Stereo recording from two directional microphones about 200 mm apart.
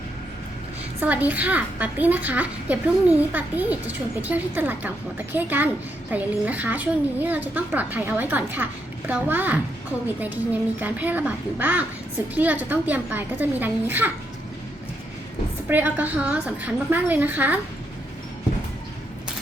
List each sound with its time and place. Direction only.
1.0 s a woman's voice: 10° right (ahead or behind)
15.7 s a woman's voice: 10° right (ahead or behind)